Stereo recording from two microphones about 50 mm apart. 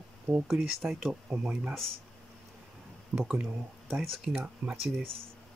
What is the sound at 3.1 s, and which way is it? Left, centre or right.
Speech, right.